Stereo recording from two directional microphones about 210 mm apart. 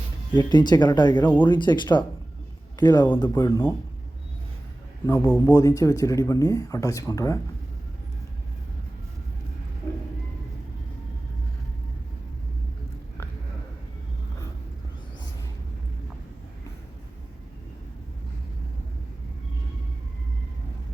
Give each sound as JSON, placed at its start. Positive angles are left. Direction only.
{"t": 0.3, "sound": "speech", "side_deg": 20}
{"t": 1.2, "sound": "speech", "side_deg": 10}
{"t": 1.5, "sound": "a man's voice", "side_deg": 20}
{"t": 5.0, "sound": "speech", "side_deg": 15}